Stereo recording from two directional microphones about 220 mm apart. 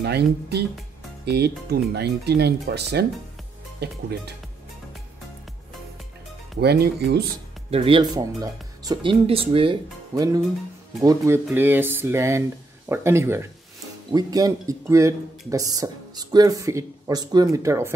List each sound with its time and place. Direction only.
0.0 s speech: 50° right (ahead or behind)
6.6 s speech: 45° right (ahead or behind)
7.7 s speech: 25° right (ahead or behind)